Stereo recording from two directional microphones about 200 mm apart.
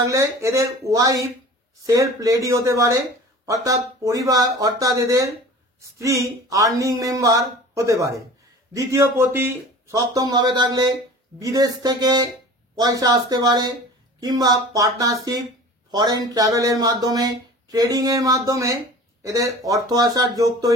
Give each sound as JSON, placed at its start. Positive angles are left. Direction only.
{"t": 0.0, "sound": "speech", "side_deg": -15}